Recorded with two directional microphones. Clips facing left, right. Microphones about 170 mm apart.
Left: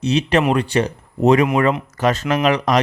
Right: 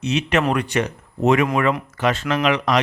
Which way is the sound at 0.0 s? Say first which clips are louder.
Left 3 dB; 35° left (ahead or behind).